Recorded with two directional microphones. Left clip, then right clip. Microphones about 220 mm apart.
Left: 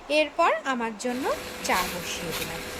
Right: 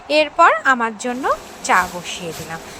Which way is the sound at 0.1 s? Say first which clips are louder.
Right 9 dB; 10° right (ahead or behind).